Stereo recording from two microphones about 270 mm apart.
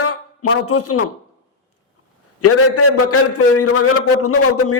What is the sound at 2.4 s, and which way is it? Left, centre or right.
A man's voice, left.